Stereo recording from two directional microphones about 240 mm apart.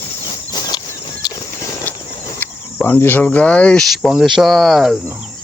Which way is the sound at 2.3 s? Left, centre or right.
Centre.